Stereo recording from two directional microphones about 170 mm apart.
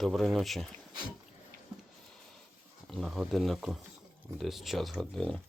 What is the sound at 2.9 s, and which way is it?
Speech, centre (ahead or behind).